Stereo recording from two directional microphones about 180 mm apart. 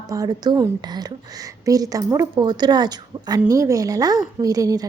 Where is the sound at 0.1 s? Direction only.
20° right (ahead or behind).